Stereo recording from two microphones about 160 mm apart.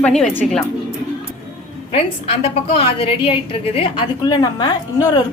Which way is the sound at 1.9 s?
40° left (ahead or behind).